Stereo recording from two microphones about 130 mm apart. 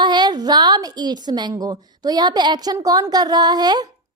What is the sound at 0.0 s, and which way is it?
A woman's voice, 35° right (ahead or behind).